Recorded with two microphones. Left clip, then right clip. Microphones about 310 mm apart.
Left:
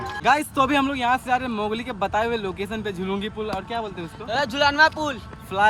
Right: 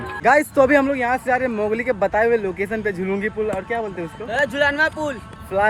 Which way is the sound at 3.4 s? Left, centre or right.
Centre.